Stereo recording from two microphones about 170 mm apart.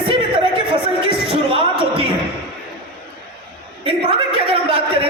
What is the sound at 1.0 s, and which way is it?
Music, 35° right (ahead or behind).